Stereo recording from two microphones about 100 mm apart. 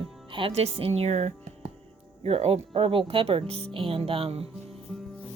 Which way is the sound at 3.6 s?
65° right (ahead or behind).